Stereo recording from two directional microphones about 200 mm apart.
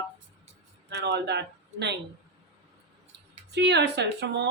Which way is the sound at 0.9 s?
60° right (ahead or behind).